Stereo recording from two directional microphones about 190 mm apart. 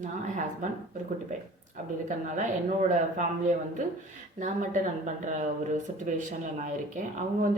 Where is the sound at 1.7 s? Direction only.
40° right (ahead or behind).